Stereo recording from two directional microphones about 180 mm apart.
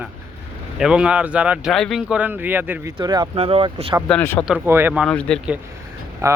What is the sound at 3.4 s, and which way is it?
Speech, 30° right (ahead or behind).